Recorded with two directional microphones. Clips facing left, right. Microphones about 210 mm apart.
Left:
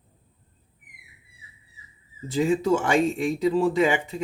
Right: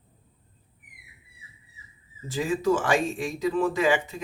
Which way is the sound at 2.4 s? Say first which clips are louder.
Left 3 dB; 25° left (ahead or behind).